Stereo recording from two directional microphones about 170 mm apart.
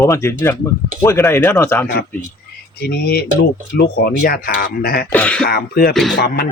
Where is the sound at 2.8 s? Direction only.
70° left (ahead or behind).